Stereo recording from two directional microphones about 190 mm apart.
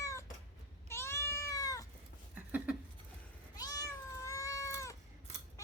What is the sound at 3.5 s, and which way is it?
Cat, 20° left (ahead or behind).